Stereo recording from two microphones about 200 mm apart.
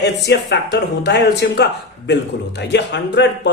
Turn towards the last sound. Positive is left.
turn(degrees=60)  # may be behind; listen again after turning